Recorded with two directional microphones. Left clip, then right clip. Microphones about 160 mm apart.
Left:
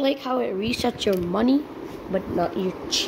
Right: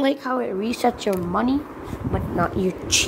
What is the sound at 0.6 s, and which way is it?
Speech, 25° right (ahead or behind).